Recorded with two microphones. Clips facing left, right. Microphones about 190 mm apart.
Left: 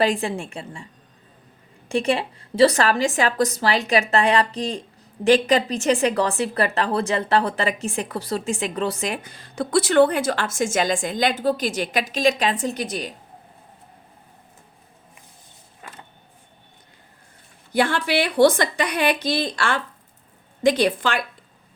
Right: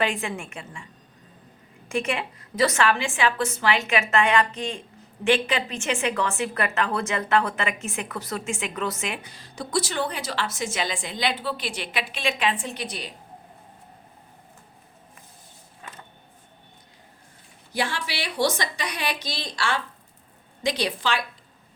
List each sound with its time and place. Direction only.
0.0 s a woman's voice: 35° left (ahead or behind)
1.9 s a woman's voice: 35° left (ahead or behind)
17.7 s a woman's voice: 55° left (ahead or behind)